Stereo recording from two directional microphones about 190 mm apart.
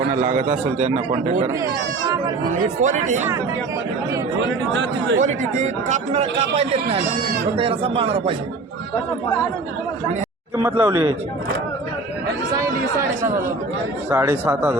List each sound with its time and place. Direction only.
0.2 s speech: 40° right (ahead or behind)
2.5 s speech: 40° right (ahead or behind)
4.7 s speech: 75° right (ahead or behind)
5.2 s speech: 40° right (ahead or behind)
10.6 s speech: 10° right (ahead or behind)
14.1 s speech: 10° right (ahead or behind)